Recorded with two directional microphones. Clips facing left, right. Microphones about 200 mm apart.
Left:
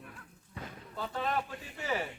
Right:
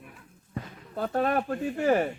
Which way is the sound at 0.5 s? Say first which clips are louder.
Right 7 dB; 55° right (ahead or behind).